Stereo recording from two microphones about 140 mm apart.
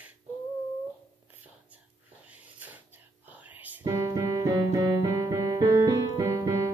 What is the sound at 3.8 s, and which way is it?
Music, 25° right (ahead or behind).